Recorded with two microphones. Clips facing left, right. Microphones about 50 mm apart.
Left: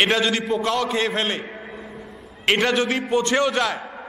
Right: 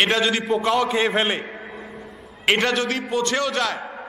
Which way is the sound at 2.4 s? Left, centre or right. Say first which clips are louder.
Left 1 dB; centre.